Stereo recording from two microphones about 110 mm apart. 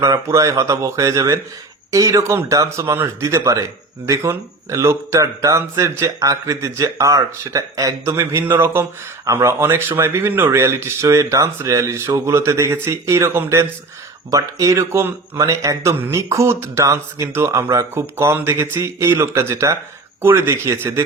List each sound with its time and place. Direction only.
0.0 s speech: 30° right (ahead or behind)